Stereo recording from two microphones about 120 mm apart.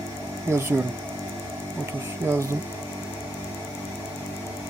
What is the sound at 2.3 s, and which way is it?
Speech, 25° right (ahead or behind).